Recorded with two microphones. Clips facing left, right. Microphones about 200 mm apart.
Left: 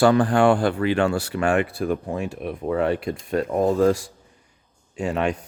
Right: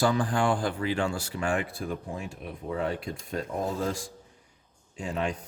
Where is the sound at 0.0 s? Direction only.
70° left (ahead or behind).